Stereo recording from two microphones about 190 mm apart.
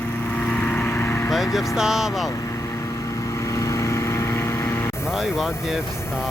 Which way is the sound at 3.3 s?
15° left (ahead or behind).